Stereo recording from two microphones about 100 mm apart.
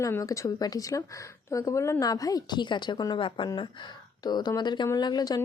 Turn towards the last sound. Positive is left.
turn(degrees=40)  # may be behind; listen again after turning